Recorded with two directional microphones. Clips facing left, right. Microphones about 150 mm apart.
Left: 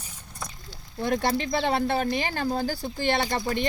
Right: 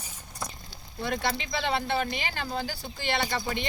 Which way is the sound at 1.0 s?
45° left (ahead or behind).